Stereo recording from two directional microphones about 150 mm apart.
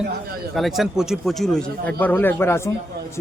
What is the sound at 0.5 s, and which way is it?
A man's voice, centre (ahead or behind).